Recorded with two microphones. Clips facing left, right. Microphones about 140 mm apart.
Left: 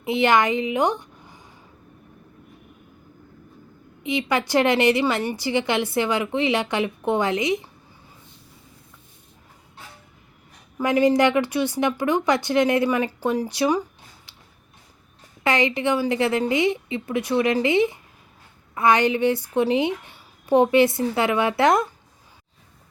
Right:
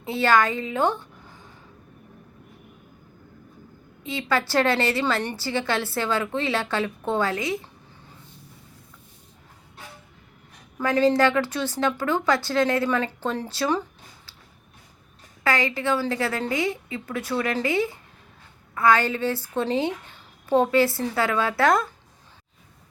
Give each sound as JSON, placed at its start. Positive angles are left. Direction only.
{"t": 0.0, "sound": "a woman's voice", "side_deg": 20}
{"t": 4.0, "sound": "a woman's voice", "side_deg": 15}
{"t": 10.8, "sound": "a woman's voice", "side_deg": 15}
{"t": 15.4, "sound": "a woman's voice", "side_deg": 20}